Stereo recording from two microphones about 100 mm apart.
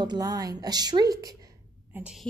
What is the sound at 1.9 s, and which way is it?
Speech, 10° right (ahead or behind).